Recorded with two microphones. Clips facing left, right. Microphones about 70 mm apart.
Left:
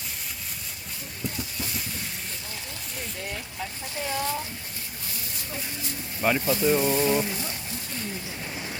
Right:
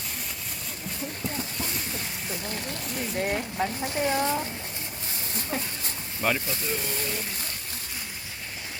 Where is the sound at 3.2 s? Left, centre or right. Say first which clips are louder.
Right 9 dB; right.